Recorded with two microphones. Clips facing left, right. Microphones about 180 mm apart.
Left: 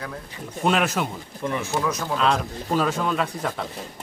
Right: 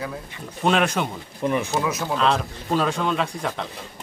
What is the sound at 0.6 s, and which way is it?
Speech, 5° left (ahead or behind).